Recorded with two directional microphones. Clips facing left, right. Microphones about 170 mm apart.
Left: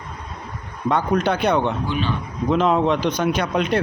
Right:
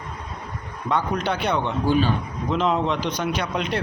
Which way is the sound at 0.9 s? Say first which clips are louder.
Left 4 dB; 45° left (ahead or behind).